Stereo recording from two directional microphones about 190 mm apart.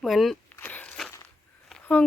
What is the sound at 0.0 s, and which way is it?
Speech, centre (ahead or behind).